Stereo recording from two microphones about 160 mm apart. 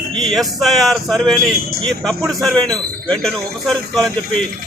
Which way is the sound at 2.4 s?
5° left (ahead or behind).